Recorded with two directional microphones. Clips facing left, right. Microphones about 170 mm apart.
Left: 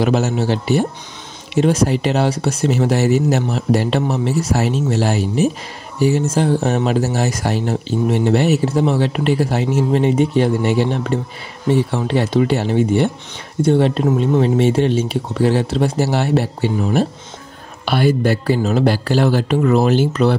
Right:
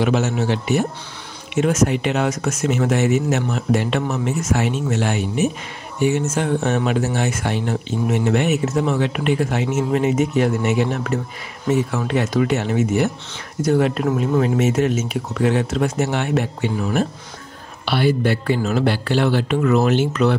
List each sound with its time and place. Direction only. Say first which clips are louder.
0.0 s speech: left 2 dB; 35° left (ahead or behind)
17.8 s speech: left 3 dB; 45° left (ahead or behind)